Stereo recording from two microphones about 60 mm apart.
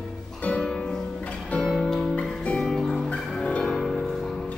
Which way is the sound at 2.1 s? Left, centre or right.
Left.